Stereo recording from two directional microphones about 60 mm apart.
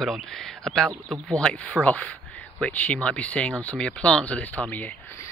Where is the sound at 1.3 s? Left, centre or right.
Centre.